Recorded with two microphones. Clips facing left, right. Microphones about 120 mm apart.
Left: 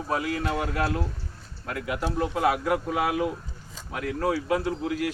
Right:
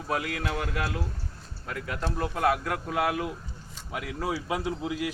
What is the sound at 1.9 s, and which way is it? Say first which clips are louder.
Speech: left 4 dB; 10° left (ahead or behind).